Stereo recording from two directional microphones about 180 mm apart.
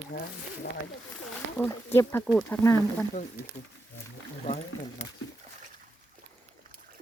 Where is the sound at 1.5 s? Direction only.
10° left (ahead or behind).